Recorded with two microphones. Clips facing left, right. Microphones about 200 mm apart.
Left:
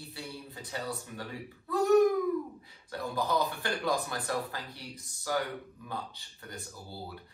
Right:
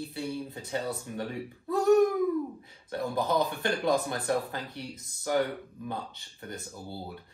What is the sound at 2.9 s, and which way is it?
Speech, 20° right (ahead or behind).